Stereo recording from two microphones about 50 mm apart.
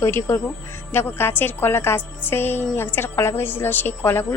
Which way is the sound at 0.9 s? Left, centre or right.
Left.